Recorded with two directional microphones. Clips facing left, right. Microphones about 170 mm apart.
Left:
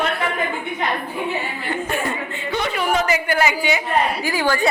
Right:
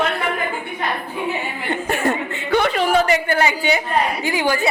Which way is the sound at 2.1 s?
65° right (ahead or behind).